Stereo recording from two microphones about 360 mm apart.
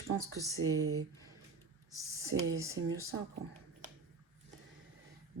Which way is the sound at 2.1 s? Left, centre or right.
Centre.